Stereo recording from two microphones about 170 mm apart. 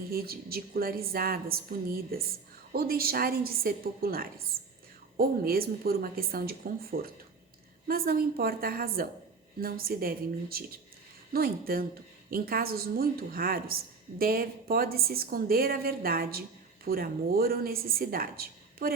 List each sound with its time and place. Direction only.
0.1 s speech: 60° right (ahead or behind)